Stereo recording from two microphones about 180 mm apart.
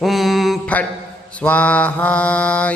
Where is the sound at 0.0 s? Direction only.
Centre (ahead or behind).